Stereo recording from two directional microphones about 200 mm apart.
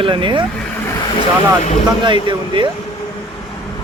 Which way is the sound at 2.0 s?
25° right (ahead or behind).